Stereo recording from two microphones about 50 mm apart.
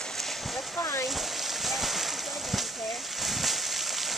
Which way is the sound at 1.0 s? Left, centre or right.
Centre.